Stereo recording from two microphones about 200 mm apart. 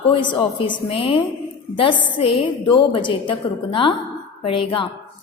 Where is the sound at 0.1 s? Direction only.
25° left (ahead or behind).